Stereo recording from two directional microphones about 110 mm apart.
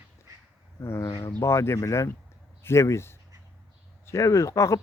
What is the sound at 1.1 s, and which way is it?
Speech, 35° left (ahead or behind).